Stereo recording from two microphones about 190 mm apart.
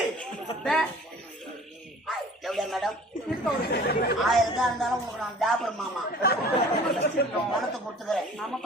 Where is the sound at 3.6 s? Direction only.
55° left (ahead or behind).